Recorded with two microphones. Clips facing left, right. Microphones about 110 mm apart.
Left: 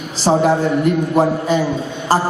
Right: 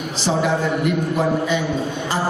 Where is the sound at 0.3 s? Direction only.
40° left (ahead or behind).